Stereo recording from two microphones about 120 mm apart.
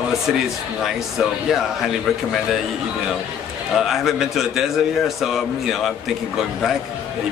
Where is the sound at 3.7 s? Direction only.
Centre (ahead or behind).